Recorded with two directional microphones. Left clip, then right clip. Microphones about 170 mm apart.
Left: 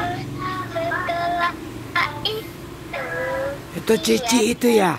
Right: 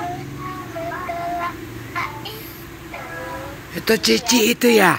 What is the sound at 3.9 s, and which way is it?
Speech, 5° left (ahead or behind).